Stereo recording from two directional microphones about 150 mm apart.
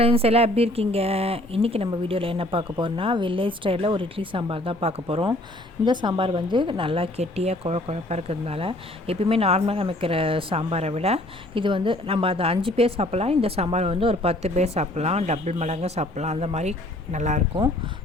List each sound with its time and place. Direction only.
0.0 s speech: 40° right (ahead or behind)